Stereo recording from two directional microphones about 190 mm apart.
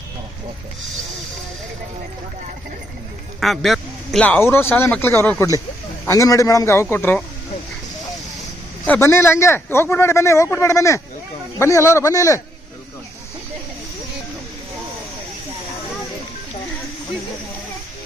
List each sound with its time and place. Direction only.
3.4 s speech: centre (ahead or behind)
8.9 s speech: 15° left (ahead or behind)